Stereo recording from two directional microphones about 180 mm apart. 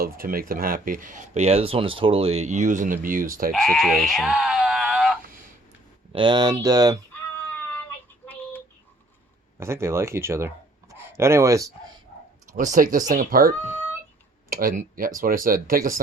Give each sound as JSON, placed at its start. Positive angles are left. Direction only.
{"t": 0.0, "sound": "speech", "side_deg": -55}
{"t": 3.5, "sound": "speech", "side_deg": 0}
{"t": 6.1, "sound": "speech", "side_deg": -25}
{"t": 9.6, "sound": "speech", "side_deg": -15}
{"t": 12.5, "sound": "speech", "side_deg": -45}
{"t": 14.5, "sound": "speech", "side_deg": -50}